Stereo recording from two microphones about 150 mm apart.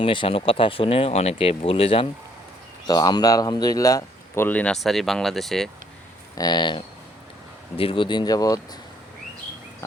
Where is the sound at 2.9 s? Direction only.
25° left (ahead or behind); by 5.7 s centre (ahead or behind).